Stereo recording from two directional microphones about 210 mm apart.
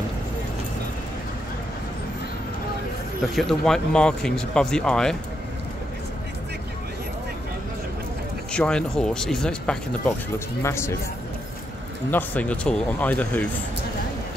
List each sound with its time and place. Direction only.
3.3 s speech: centre (ahead or behind)
8.5 s speech: 5° left (ahead or behind)
12.1 s speech: 10° left (ahead or behind)